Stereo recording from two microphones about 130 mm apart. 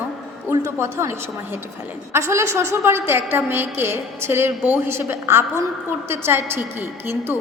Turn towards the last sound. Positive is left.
turn(degrees=-15)  # may be behind; listen again after turning